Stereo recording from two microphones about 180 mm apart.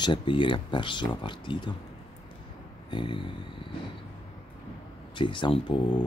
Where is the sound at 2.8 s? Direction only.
25° left (ahead or behind).